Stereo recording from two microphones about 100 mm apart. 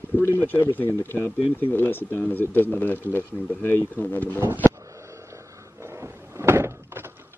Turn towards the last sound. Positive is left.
turn(degrees=-25)  # may be behind; listen again after turning